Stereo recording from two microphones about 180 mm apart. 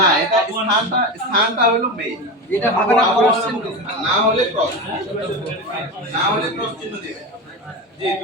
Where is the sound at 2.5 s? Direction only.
10° left (ahead or behind).